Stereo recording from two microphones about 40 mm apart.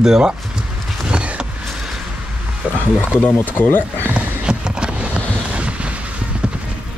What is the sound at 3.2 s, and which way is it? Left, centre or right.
Speech, left.